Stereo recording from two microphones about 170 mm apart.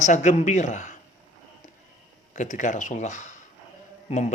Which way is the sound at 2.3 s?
45° left (ahead or behind).